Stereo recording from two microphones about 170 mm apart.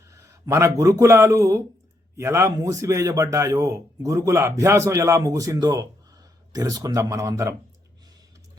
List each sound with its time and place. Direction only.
0.1 s a man's voice: 15° right (ahead or behind)